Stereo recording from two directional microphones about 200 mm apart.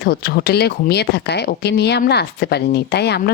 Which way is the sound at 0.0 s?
50° left (ahead or behind).